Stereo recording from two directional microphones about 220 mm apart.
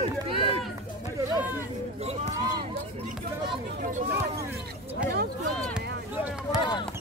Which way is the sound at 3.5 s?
40° right (ahead or behind).